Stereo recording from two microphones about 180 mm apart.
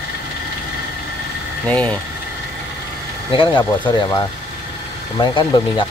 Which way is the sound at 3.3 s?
25° left (ahead or behind).